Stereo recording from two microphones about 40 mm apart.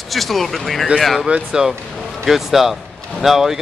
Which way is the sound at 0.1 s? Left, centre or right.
Centre.